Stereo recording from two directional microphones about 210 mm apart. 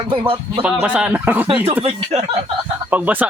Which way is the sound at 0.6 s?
5° right (ahead or behind).